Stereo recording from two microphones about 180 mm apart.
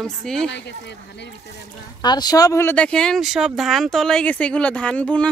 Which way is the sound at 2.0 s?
20° left (ahead or behind).